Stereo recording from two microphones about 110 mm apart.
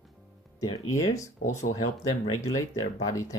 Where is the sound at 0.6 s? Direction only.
35° left (ahead or behind).